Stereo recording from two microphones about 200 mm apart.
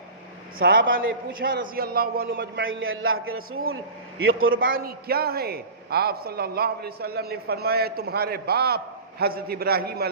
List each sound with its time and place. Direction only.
0.6 s a man's voice: 45° right (ahead or behind)
2.6 s a man's voice: 80° right
4.6 s a man's voice: 50° right (ahead or behind)